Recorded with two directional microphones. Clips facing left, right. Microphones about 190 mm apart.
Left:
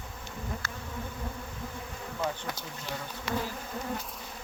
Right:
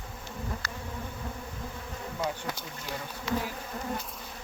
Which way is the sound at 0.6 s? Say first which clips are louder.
Right 1 dB; 35° right (ahead or behind).